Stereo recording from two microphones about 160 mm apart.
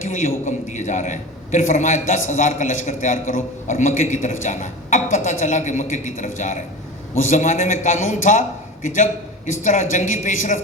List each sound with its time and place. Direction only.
0.0 s a man's voice: 50° left (ahead or behind)